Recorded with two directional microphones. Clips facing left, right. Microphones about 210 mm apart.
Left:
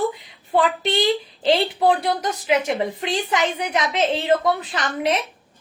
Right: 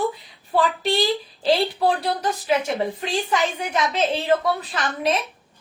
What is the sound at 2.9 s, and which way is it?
A woman's voice, 20° left (ahead or behind).